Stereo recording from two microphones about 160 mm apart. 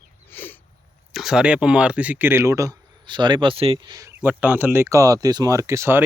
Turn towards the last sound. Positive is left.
turn(degrees=-15)  # may be behind; listen again after turning